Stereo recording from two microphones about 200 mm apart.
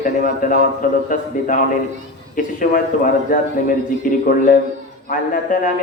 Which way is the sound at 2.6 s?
40° left (ahead or behind).